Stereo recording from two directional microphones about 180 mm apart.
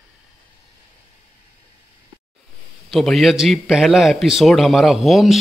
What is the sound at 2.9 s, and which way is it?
A man's voice, centre (ahead or behind).